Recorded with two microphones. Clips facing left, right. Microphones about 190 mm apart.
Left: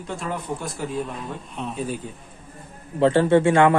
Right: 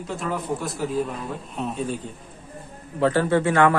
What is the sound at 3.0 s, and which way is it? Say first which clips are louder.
Speech: left 3 dB; 25° left (ahead or behind).